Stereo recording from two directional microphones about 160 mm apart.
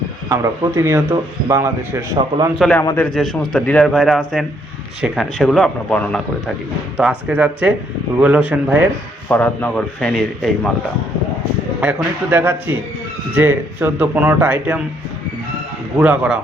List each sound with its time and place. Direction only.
0.3 s speech: 20° right (ahead or behind)
2.7 s a man's voice: 15° left (ahead or behind)
3.1 s speech: centre (ahead or behind)
6.9 s speech: 5° right (ahead or behind)
9.3 s a man's voice: 10° left (ahead or behind)
11.8 s speech: 10° right (ahead or behind)
16.0 s speech: 5° right (ahead or behind)